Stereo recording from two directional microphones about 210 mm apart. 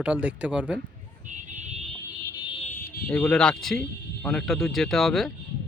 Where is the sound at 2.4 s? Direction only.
25° left (ahead or behind).